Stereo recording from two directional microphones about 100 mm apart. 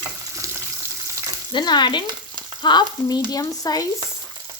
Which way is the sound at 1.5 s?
50° left (ahead or behind).